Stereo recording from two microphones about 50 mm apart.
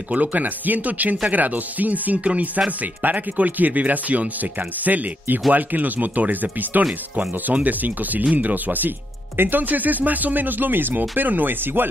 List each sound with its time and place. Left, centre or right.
0.1 s speech: right